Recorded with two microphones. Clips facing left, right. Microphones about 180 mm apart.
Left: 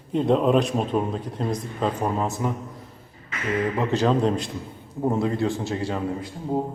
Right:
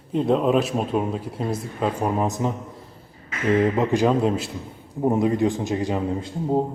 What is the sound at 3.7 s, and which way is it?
Speech, 15° right (ahead or behind).